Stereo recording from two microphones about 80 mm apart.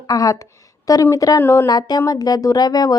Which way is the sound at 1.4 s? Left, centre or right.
Left.